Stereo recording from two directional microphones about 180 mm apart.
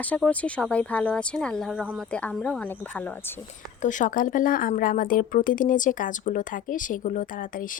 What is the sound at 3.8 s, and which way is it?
Speech, 45° left (ahead or behind).